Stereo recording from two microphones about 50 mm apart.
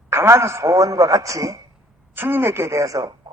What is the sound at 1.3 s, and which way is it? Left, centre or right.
Speech, right.